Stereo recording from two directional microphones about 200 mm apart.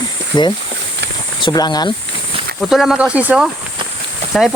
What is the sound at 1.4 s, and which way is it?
Speech, 20° left (ahead or behind).